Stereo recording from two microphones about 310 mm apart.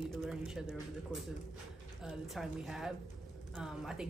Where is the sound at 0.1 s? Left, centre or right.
Centre.